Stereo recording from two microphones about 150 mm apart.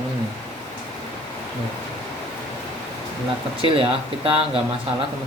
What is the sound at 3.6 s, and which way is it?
Speech, 40° right (ahead or behind).